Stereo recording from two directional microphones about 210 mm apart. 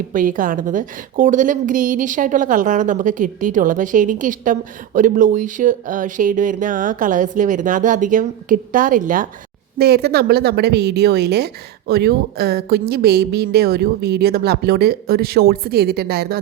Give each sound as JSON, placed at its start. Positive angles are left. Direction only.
{"t": 0.1, "sound": "a woman's voice", "side_deg": -40}